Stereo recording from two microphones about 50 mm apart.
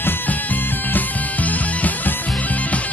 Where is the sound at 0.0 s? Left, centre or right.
Left.